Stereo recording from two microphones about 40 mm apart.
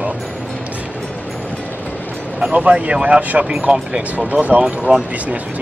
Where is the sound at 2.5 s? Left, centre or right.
Right.